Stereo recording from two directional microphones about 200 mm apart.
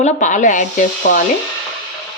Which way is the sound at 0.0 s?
35° left (ahead or behind).